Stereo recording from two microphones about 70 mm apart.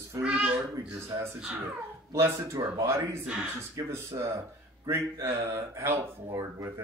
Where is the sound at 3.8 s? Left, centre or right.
Right.